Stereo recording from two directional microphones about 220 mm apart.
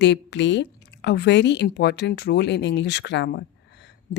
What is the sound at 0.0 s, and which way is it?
A woman's voice, 50° left (ahead or behind).